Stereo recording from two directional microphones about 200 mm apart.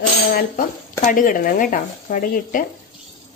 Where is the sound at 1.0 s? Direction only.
40° left (ahead or behind).